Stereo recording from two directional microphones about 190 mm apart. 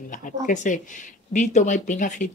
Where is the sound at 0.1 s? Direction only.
45° left (ahead or behind).